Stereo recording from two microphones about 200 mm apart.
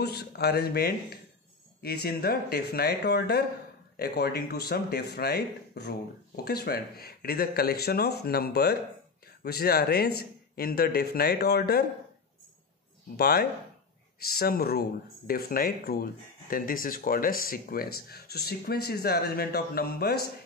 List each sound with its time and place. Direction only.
0.0 s speech: 55° left (ahead or behind)
13.1 s speech: 50° left (ahead or behind)